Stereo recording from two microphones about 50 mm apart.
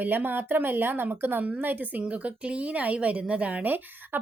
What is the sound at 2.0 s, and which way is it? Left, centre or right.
Speech, right.